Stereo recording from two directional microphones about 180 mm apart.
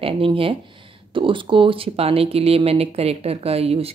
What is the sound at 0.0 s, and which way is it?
Speech, 30° right (ahead or behind).